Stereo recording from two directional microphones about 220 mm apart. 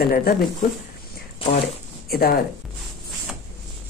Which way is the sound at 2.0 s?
45° left (ahead or behind).